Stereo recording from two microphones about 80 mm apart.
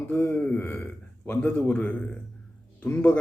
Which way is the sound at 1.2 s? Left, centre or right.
Centre.